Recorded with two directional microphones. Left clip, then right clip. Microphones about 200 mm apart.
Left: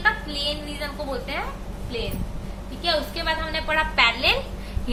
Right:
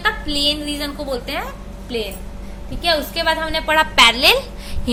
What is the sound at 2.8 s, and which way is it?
A woman's voice, 45° right (ahead or behind).